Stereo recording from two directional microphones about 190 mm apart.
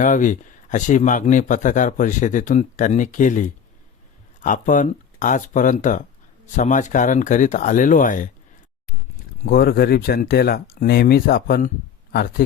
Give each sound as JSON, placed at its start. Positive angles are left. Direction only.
{"t": 0.0, "sound": "speech", "side_deg": 40}
{"t": 9.5, "sound": "speech", "side_deg": 50}